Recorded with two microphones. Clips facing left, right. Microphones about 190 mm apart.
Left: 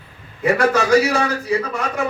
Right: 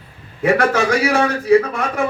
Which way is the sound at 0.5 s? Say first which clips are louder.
Left 5 dB; 55° right (ahead or behind).